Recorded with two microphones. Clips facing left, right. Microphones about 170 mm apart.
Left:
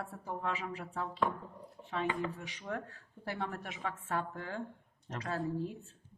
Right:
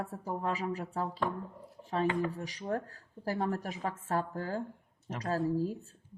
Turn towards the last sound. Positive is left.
turn(degrees=-40)  # may be behind; listen again after turning